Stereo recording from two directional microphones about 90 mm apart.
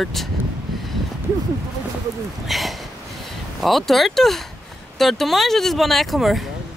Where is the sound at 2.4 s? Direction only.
Centre (ahead or behind).